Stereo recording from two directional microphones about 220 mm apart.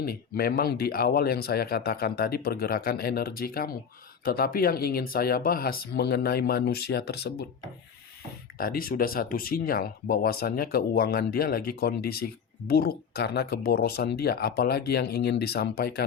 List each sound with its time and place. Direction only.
0.0 s speech: 45° left (ahead or behind)
8.5 s speech: 40° left (ahead or behind)